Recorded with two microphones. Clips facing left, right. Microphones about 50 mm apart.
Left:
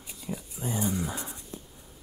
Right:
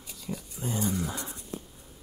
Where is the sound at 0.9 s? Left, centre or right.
Centre.